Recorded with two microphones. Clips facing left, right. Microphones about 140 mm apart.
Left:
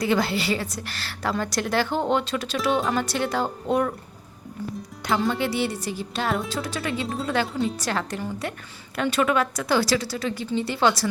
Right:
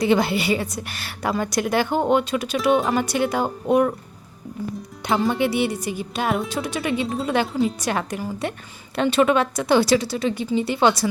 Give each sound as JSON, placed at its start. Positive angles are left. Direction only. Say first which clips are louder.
{"t": 0.0, "sound": "a woman's voice", "louder": "right 4 dB", "side_deg": -20}
{"t": 5.3, "sound": "a woman's voice", "louder": "right 4 dB", "side_deg": -15}
{"t": 7.4, "sound": "speech", "louder": "right 4 dB", "side_deg": 0}
{"t": 7.8, "sound": "a woman's voice", "louder": "right 3 dB", "side_deg": -15}
{"t": 9.0, "sound": "speech", "louder": "right 4 dB", "side_deg": -25}